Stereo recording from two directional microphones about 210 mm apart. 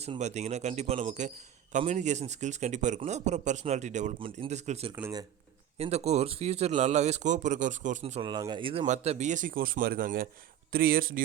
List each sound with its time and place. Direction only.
0.0 s speech: 30° right (ahead or behind)
4.9 s speech: 10° right (ahead or behind)
5.7 s speech: 30° right (ahead or behind)